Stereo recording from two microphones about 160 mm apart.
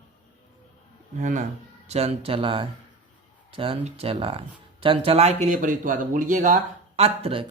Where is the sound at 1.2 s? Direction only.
50° right (ahead or behind).